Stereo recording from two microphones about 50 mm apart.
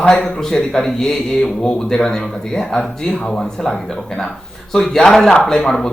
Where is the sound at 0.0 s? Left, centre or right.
Left.